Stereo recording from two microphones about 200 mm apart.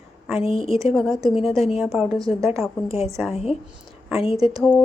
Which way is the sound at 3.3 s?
30° left (ahead or behind).